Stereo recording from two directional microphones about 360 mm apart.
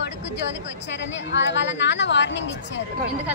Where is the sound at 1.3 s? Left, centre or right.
Left.